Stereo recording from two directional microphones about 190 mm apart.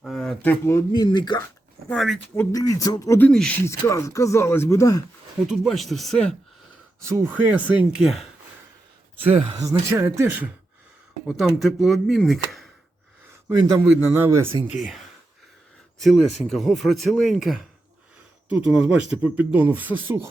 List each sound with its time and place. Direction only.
0.0 s speech: centre (ahead or behind); by 1.5 s 20° left (ahead or behind)
1.9 s speech: centre (ahead or behind)
2.3 s speech: 15° left (ahead or behind)
5.5 s speech: centre (ahead or behind)
7.0 s speech: 15° right (ahead or behind)
9.1 s speech: 30° right (ahead or behind)
9.6 s speech: 15° right (ahead or behind); by 12.6 s centre (ahead or behind)
13.6 s speech: 20° right (ahead or behind)
14.7 s speech: centre (ahead or behind)